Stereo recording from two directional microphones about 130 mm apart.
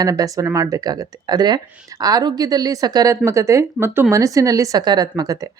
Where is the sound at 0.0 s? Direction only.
25° right (ahead or behind).